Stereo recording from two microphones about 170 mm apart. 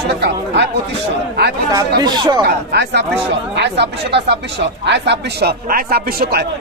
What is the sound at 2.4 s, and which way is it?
Speech, 85° right.